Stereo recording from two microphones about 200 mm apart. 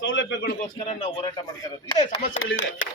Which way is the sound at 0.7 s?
30° left (ahead or behind).